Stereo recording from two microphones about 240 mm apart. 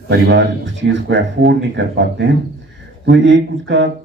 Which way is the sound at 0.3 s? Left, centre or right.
Right.